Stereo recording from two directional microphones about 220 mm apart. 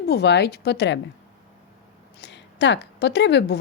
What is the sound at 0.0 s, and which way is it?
Speech, 50° left (ahead or behind).